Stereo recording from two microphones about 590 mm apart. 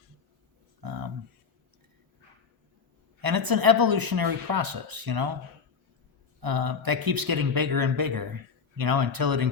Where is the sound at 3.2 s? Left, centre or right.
Right.